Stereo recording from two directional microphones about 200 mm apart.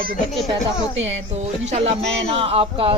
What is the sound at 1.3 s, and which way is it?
Speech, 35° right (ahead or behind).